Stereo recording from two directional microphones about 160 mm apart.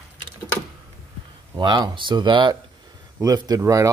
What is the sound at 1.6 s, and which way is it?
Speech, 30° right (ahead or behind).